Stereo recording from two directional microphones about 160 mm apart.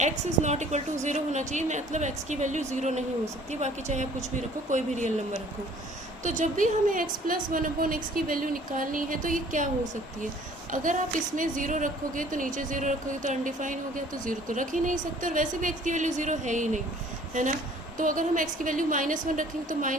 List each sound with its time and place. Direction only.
0.0 s a woman's voice: 45° right (ahead or behind)
11.3 s a woman's voice: 55° right (ahead or behind)
17.9 s a woman's voice: 55° right (ahead or behind)